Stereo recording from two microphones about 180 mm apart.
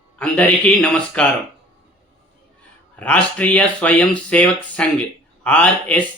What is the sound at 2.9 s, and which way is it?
Speech, 5° left (ahead or behind).